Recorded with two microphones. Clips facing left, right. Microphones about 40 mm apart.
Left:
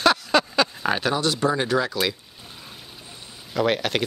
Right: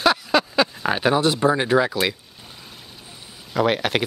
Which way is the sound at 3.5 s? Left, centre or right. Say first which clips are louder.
Right 2 dB; centre.